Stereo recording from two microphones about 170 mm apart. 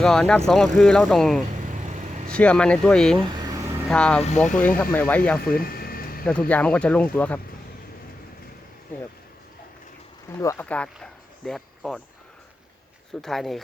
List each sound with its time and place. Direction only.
0.0 s speech: 5° left (ahead or behind)
1.7 s a sound: 45° right (ahead or behind)
2.3 s speech: 5° left (ahead or behind)
3.3 s a sound: 20° right (ahead or behind)
3.8 s speech: 5° left (ahead or behind)
5.5 s a sound: 60° left (ahead or behind)
6.2 s speech: 10° left (ahead or behind)
10.4 s speech: 20° left (ahead or behind)
10.7 s speech: 5° left (ahead or behind)
13.2 s speech: centre (ahead or behind)